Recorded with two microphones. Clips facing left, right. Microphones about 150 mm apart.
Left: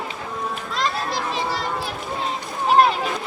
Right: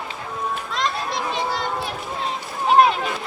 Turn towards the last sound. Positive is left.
turn(degrees=0)  # may be behind; listen again after turning